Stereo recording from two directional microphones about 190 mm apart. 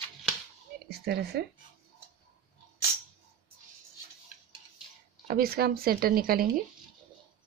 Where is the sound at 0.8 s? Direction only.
60° right (ahead or behind).